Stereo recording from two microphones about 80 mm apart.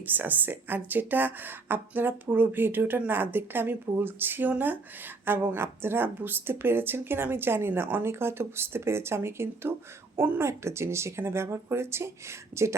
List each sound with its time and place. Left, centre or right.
0.0 s speech: right
10.4 s speech: right